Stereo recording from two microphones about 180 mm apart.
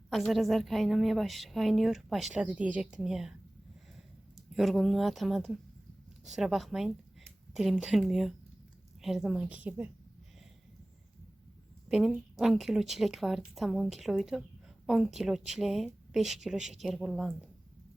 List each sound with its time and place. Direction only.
0.1 s a woman's voice: centre (ahead or behind)
4.5 s a woman's voice: centre (ahead or behind)
11.9 s a woman's voice: centre (ahead or behind)